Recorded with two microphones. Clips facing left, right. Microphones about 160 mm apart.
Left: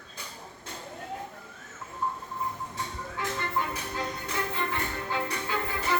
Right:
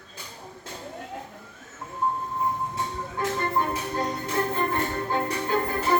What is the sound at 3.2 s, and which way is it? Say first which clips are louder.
Music: right 5 dB; 40° right (ahead or behind).